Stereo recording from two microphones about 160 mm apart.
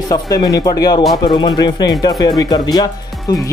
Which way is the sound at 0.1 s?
20° left (ahead or behind).